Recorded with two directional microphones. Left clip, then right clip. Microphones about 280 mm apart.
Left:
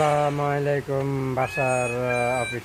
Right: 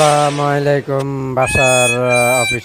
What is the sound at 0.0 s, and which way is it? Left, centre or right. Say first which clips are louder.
Speech: right 9 dB; right.